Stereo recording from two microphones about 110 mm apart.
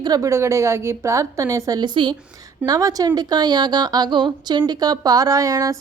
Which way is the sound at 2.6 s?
35° right (ahead or behind).